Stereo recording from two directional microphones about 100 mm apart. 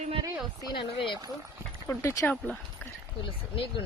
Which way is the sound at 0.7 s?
55° left (ahead or behind).